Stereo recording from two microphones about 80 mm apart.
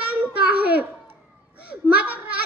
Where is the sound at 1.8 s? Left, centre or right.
Right.